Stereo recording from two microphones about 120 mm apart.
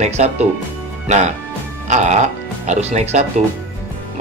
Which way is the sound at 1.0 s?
80° right.